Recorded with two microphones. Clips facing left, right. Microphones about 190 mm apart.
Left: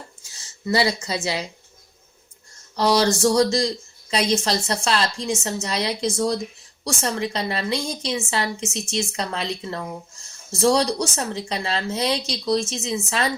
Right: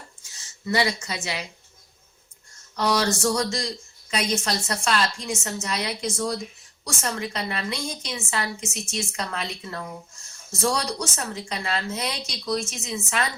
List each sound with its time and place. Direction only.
0.7 s a woman's voice: 35° left (ahead or behind)
2.7 s a woman's voice: 35° left (ahead or behind)